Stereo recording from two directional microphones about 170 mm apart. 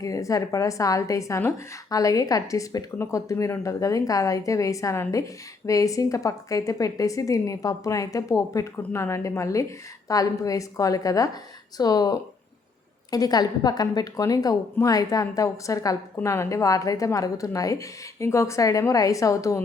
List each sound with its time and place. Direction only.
0.0 s a woman's voice: 20° left (ahead or behind)